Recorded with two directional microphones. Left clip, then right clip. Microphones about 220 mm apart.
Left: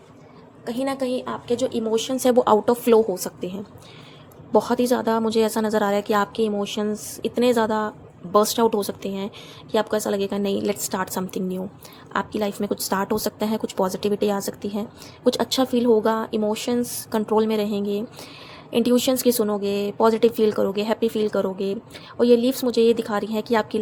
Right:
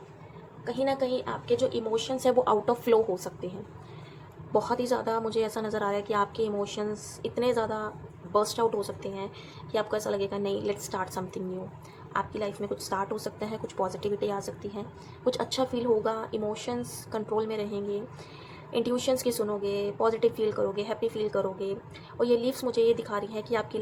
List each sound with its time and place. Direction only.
0.6 s a woman's voice: 40° left (ahead or behind)
4.5 s a woman's voice: 35° left (ahead or behind)